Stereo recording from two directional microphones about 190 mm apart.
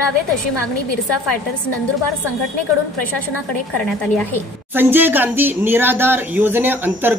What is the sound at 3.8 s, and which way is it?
Speech, 5° left (ahead or behind).